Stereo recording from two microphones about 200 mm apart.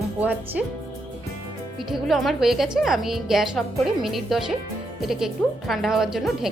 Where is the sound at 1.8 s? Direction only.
Centre (ahead or behind).